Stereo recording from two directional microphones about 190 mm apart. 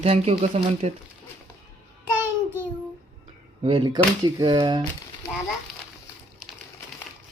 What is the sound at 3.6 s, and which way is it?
Speech, 25° right (ahead or behind).